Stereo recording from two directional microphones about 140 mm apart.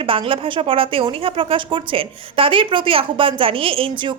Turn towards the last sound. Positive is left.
turn(degrees=-40)  # may be behind; listen again after turning